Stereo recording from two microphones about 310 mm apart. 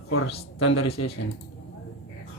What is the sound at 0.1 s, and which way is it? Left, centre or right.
Speech, left.